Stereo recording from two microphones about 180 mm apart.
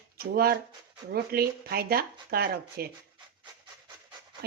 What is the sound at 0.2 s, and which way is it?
Speech, 55° right (ahead or behind).